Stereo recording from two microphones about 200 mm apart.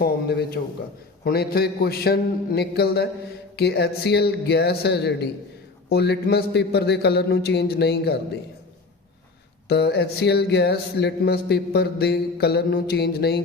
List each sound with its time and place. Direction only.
0.0 s a man's voice: 55° left (ahead or behind)
9.6 s speech: 55° left (ahead or behind)